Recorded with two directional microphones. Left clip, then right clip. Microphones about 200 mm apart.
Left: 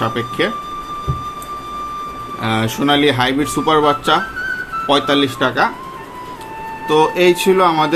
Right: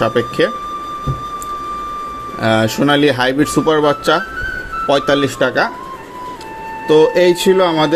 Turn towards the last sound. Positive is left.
turn(degrees=-15)  # may be behind; listen again after turning